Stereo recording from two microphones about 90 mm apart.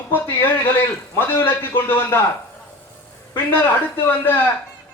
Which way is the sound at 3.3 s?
25° left (ahead or behind).